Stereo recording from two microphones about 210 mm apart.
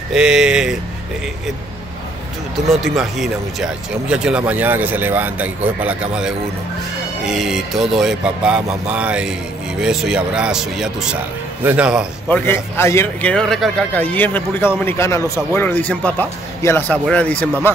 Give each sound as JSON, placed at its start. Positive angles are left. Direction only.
{"t": 0.1, "sound": "speech", "side_deg": -5}
{"t": 2.7, "sound": "speech", "side_deg": 0}
{"t": 12.3, "sound": "speech", "side_deg": 10}